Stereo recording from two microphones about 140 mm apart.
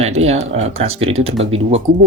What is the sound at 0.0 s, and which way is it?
Speech, 50° right (ahead or behind).